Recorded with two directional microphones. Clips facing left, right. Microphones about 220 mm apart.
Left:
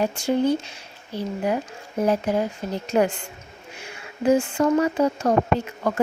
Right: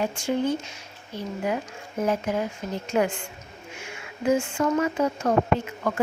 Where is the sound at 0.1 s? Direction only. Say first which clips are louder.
Left 4 dB; 35° left (ahead or behind).